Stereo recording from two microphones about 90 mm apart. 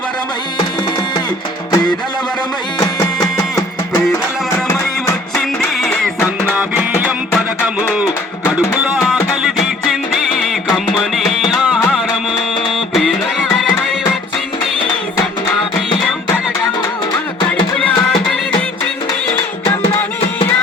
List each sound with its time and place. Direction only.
1.7 s music: 50° left (ahead or behind)
6.5 s music: 15° right (ahead or behind)
9.4 s music: centre (ahead or behind)
12.9 s music: centre (ahead or behind)